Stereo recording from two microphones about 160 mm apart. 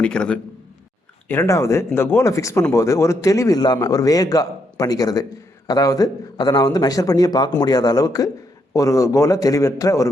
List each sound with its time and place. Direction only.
0.0 s speech: 5° left (ahead or behind)
1.3 s a man's voice: 15° left (ahead or behind)